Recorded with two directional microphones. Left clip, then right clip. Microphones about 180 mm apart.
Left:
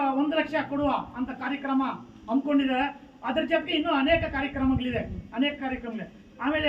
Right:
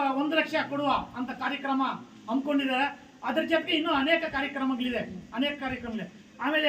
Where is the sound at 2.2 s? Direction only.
5° right (ahead or behind).